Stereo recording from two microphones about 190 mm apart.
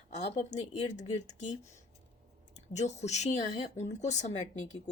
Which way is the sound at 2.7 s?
35° left (ahead or behind).